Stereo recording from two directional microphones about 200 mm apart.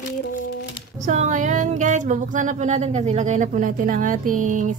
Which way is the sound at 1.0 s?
35° right (ahead or behind).